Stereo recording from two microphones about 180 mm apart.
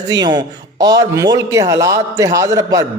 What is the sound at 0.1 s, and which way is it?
A man's voice, 25° right (ahead or behind).